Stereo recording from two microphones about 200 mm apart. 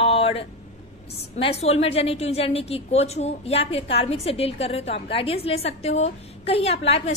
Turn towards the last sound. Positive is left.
turn(degrees=30)  # may be behind; listen again after turning